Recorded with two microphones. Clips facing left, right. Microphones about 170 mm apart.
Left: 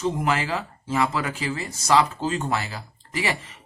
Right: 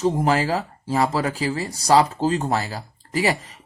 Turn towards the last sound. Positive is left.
turn(degrees=-40)  # may be behind; listen again after turning